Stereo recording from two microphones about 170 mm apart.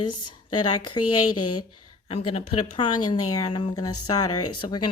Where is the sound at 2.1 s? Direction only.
35° left (ahead or behind).